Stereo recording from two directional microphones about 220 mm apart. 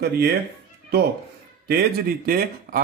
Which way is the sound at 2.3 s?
40° right (ahead or behind).